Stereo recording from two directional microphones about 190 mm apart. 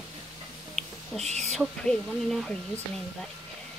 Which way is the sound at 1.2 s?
35° right (ahead or behind).